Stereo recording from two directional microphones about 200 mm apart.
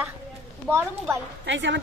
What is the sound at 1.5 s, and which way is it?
Speech, 65° right (ahead or behind).